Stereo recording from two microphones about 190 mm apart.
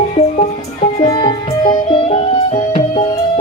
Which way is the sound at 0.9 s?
25° left (ahead or behind).